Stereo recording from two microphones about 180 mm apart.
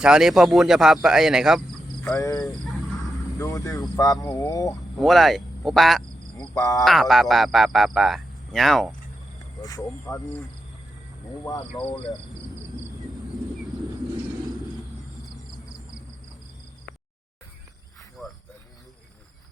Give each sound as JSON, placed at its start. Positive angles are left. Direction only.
{"t": 0.0, "sound": "speech", "side_deg": -5}
{"t": 2.1, "sound": "speech", "side_deg": 20}
{"t": 2.4, "sound": "speech", "side_deg": 0}
{"t": 3.3, "sound": "speech", "side_deg": 20}
{"t": 4.9, "sound": "speech", "side_deg": 0}
{"t": 6.4, "sound": "speech", "side_deg": 20}
{"t": 6.8, "sound": "speech", "side_deg": 0}
{"t": 9.6, "sound": "speech", "side_deg": 20}
{"t": 18.2, "sound": "a sound", "side_deg": 0}